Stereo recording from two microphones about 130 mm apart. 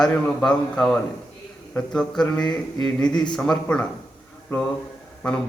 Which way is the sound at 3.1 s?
35° left (ahead or behind).